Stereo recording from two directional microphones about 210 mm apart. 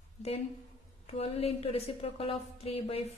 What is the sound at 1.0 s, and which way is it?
A woman's voice, 30° left (ahead or behind).